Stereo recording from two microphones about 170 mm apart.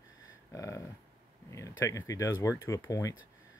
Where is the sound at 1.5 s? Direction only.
20° left (ahead or behind).